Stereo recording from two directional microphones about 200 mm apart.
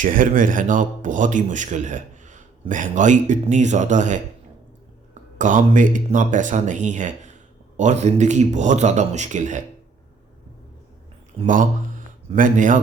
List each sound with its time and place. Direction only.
0.0 s speech: 40° right (ahead or behind)
5.4 s speech: 40° right (ahead or behind)
11.4 s speech: 40° right (ahead or behind)